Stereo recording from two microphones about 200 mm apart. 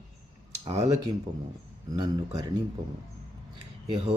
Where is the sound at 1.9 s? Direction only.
20° right (ahead or behind).